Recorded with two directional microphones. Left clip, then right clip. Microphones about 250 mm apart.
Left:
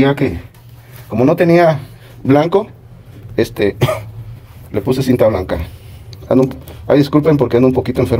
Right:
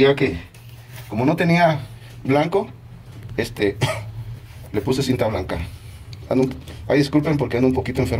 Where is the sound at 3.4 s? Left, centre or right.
Left.